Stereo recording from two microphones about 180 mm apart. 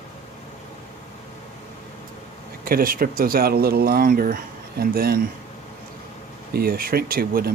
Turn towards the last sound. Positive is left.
turn(degrees=-55)  # may be behind; listen again after turning